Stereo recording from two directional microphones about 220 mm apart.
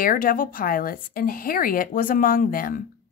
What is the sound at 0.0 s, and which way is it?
Speech, 40° left (ahead or behind).